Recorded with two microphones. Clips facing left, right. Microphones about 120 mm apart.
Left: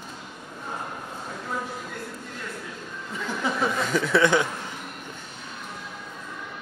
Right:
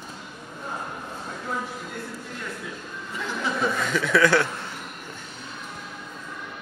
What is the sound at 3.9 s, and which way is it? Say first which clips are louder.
Speech: even; 30° left (ahead or behind).